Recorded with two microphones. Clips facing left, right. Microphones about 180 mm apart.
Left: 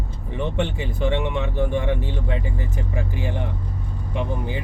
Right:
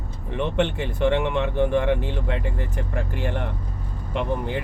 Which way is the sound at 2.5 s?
65° right (ahead or behind).